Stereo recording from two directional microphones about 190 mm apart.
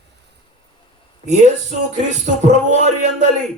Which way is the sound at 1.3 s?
40° right (ahead or behind).